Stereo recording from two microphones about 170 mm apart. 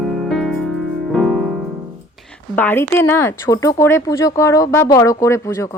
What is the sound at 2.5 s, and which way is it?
A woman's voice, 10° left (ahead or behind).